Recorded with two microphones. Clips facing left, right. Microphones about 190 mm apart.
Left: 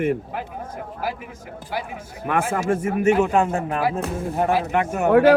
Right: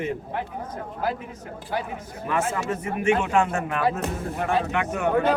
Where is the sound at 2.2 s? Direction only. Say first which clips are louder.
Left 3 dB; 60° left (ahead or behind).